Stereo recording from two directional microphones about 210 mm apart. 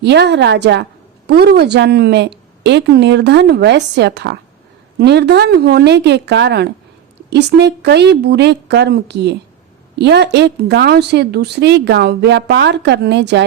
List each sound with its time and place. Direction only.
0.0 s a woman's voice: 55° right (ahead or behind)